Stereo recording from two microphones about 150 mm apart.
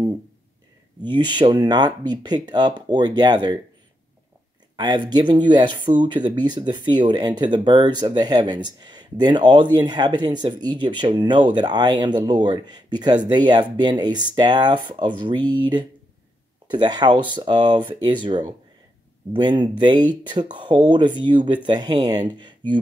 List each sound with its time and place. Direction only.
1.0 s speech: 30° right (ahead or behind)
4.7 s speech: 25° right (ahead or behind)